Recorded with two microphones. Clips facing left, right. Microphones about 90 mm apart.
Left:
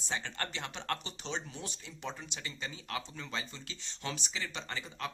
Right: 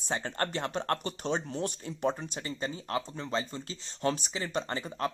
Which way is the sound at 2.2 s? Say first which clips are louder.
Right 7 dB; 35° right (ahead or behind).